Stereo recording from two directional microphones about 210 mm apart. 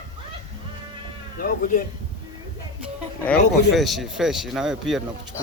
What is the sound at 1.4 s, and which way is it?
Speech, 40° left (ahead or behind).